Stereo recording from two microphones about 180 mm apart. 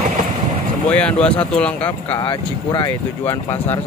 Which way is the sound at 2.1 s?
25° left (ahead or behind).